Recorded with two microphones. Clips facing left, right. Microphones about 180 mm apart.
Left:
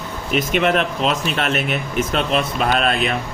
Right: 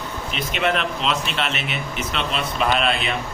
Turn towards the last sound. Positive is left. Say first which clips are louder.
# left 3 dB
turn(degrees=45)  # may be behind; listen again after turning